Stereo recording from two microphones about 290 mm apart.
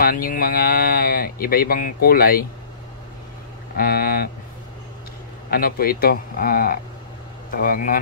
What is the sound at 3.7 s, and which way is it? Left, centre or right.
Speech, left.